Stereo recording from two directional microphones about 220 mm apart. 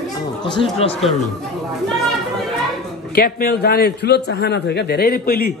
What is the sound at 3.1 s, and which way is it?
A man's voice, 45° left (ahead or behind).